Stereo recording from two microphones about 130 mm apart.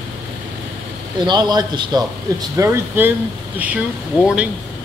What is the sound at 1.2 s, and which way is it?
A man's voice, 30° right (ahead or behind).